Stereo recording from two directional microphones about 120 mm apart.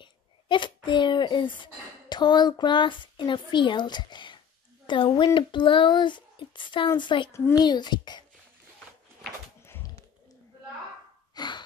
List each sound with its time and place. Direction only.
0.0 s a sound: 40° left (ahead or behind)
0.8 s a child's voice: 40° left (ahead or behind)
11.3 s gasp: 40° left (ahead or behind)